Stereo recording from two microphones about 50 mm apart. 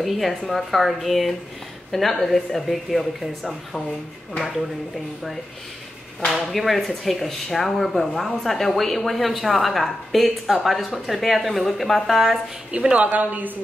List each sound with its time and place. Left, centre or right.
0.0 s speech: centre
6.3 s speech: centre
12.9 s a woman's voice: right